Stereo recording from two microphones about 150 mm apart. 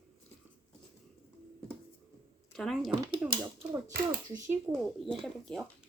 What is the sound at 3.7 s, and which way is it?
Speech, 20° right (ahead or behind).